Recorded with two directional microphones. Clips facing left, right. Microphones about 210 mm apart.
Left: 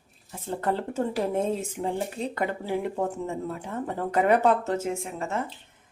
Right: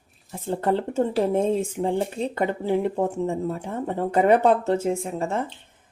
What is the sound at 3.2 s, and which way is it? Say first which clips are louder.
Speech: right 6 dB; 30° right (ahead or behind).